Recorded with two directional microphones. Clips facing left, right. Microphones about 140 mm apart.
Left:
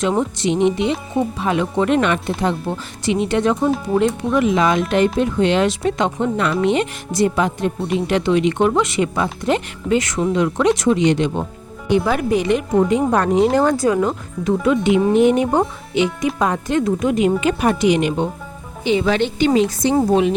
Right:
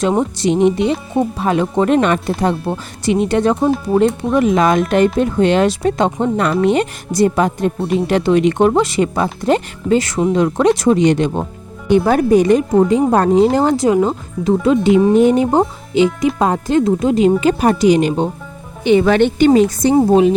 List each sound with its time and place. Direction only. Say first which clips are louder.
0.0 s speech: right 3 dB; 35° right (ahead or behind)
18.9 s speech: right 6 dB; 55° right (ahead or behind)
20.1 s speech: right 5 dB; 35° right (ahead or behind)